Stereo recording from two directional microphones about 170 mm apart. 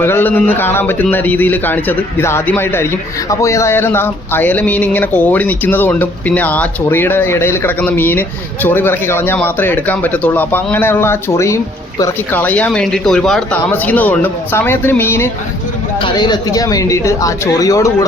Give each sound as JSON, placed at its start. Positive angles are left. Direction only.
{"t": 0.0, "sound": "a man's voice", "side_deg": 10}
{"t": 16.0, "sound": "speech", "side_deg": 30}